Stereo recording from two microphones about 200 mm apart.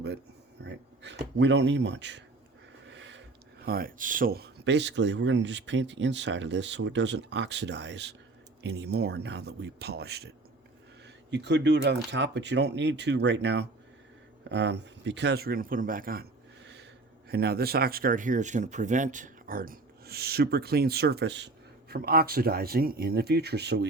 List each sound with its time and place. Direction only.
0.6 s speech: 60° right (ahead or behind)
2.9 s a sound: 65° right (ahead or behind)
3.7 s speech: 45° right (ahead or behind)
11.3 s speech: 60° right (ahead or behind)
17.2 s speech: 50° right (ahead or behind)